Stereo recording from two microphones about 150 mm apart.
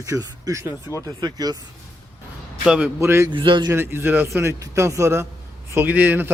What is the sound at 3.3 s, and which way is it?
Speech, 35° right (ahead or behind).